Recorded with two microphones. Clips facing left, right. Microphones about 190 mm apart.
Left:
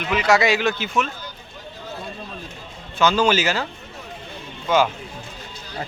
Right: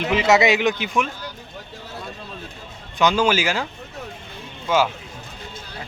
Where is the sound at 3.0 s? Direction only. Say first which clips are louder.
Even; 15° right (ahead or behind).